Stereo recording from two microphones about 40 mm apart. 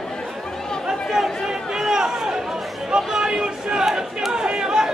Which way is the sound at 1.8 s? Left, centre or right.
Centre.